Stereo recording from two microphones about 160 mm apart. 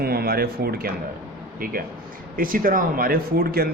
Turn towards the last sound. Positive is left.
turn(degrees=-70)  # may be behind; listen again after turning